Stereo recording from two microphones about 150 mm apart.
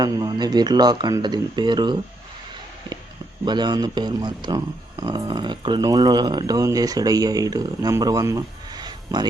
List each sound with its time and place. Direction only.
0.0 s speech: 25° right (ahead or behind)
3.4 s speech: 30° right (ahead or behind)